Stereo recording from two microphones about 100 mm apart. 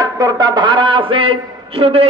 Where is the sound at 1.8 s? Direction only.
80° right.